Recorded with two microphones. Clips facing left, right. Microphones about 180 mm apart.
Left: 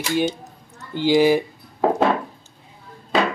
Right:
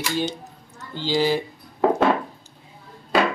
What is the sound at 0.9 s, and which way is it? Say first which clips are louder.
Dishes: left 6 dB; 15° left (ahead or behind).